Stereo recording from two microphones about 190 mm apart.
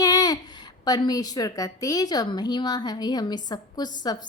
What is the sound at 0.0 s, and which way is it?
A woman's voice, 20° left (ahead or behind).